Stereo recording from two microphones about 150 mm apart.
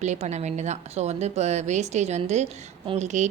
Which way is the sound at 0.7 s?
45° right (ahead or behind).